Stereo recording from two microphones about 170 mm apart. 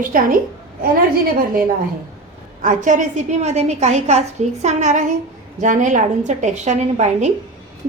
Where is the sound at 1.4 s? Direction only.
55° right (ahead or behind).